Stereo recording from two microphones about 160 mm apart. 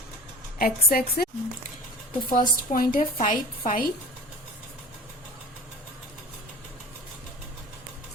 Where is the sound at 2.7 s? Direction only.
60° left (ahead or behind).